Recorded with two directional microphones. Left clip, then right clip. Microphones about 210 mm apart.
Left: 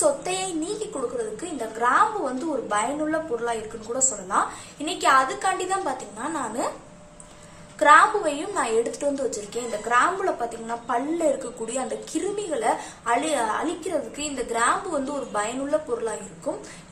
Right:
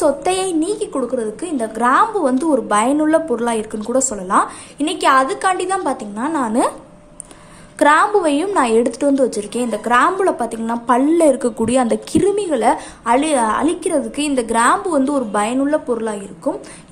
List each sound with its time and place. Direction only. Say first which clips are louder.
0.0 s a woman's voice: right 7 dB; 40° right (ahead or behind)
7.8 s a woman's voice: right 3 dB; 50° right (ahead or behind)